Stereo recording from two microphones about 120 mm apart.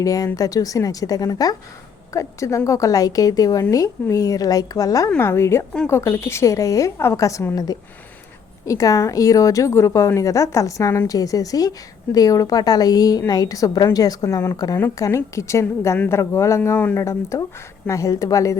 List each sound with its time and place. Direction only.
0.0 s a woman's voice: 30° left (ahead or behind)
14.8 s a woman's voice: 20° left (ahead or behind)